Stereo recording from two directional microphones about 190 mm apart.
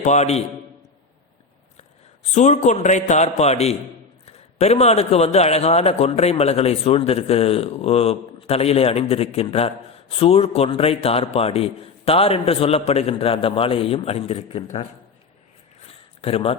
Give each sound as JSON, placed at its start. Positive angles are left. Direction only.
{"t": 0.0, "sound": "a man's voice", "side_deg": 35}
{"t": 2.3, "sound": "a man's voice", "side_deg": 40}
{"t": 15.9, "sound": "a sound", "side_deg": 30}